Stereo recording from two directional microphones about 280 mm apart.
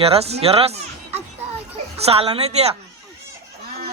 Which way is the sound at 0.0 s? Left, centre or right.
Right.